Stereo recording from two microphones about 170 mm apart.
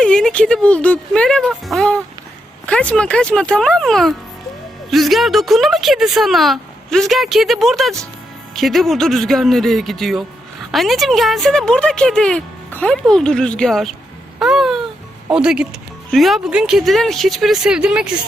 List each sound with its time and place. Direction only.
0.0 s a woman's voice: 5° left (ahead or behind)
14.3 s a sound: 5° right (ahead or behind)
15.3 s a woman's voice: 5° right (ahead or behind)